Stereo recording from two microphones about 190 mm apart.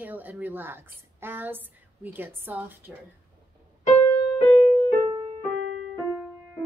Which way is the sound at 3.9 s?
10° left (ahead or behind).